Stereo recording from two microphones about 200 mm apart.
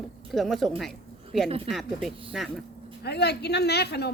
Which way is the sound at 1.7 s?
Centre (ahead or behind).